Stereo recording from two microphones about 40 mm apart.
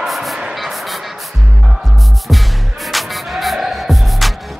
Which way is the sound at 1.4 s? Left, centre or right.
Centre.